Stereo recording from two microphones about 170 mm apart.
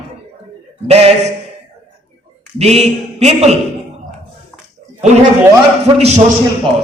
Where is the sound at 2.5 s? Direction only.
40° right (ahead or behind).